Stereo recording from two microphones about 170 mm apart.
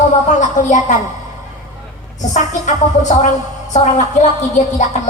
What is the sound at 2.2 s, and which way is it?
Speech, 45° left (ahead or behind).